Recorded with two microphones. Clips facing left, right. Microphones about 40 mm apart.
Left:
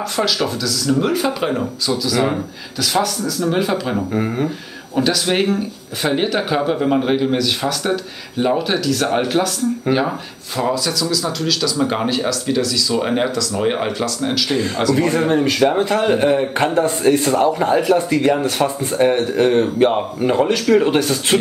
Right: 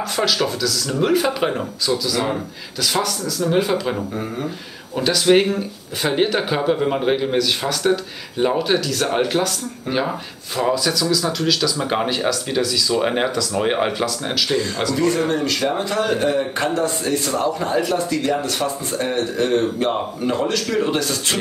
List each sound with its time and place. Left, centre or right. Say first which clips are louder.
0.1 s a man's voice: even; centre
4.1 s a man's voice: left 6 dB; left
4.9 s a man's voice: right 2 dB; centre
15.0 s a man's voice: left 1 dB; left